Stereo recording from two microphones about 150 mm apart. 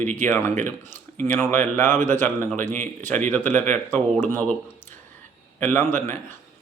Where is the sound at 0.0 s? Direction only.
55° right (ahead or behind).